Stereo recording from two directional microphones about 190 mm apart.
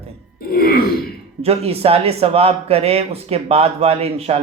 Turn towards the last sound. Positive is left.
turn(degrees=-35)  # may be behind; listen again after turning